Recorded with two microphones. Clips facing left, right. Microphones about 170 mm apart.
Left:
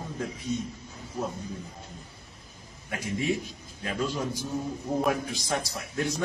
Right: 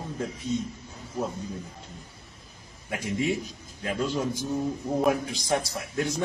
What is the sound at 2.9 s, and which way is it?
A man's voice, 25° right (ahead or behind).